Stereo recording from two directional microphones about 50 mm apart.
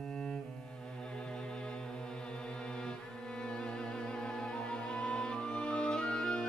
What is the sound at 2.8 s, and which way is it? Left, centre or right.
Cello, centre.